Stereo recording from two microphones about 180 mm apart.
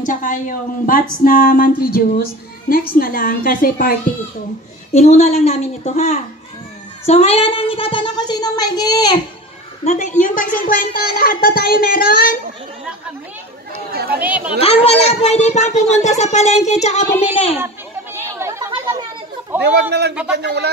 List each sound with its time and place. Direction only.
0.0 s speech: 45° left (ahead or behind)
4.9 s speech: 40° left (ahead or behind); by 9.2 s 20° left (ahead or behind)
9.8 s speech: 40° left (ahead or behind)
13.9 s speech: 60° right (ahead or behind)
14.2 s a child's voice: 10° right (ahead or behind)
14.6 s speech: 35° left (ahead or behind)
18.2 s chatter: 15° right (ahead or behind)
19.6 s speech: 65° right (ahead or behind)